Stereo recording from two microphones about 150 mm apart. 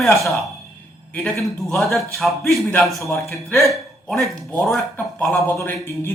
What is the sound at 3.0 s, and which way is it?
Speech, 15° left (ahead or behind).